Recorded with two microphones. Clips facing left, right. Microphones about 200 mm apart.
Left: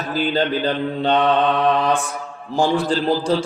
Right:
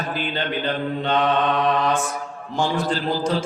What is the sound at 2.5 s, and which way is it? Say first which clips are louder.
Speech: left 4 dB; 35° left (ahead or behind).